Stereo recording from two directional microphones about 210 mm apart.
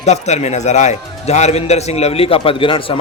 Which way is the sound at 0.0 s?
30° left (ahead or behind).